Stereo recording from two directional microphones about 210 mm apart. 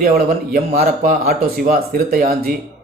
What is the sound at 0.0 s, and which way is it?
Speech, 45° right (ahead or behind).